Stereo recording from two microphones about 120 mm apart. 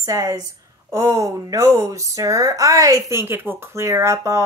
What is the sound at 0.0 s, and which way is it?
A woman's voice, 25° right (ahead or behind).